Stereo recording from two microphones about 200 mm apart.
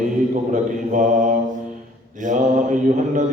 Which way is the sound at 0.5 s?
40° right (ahead or behind).